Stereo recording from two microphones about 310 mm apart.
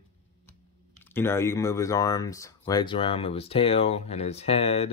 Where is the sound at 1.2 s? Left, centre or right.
Centre.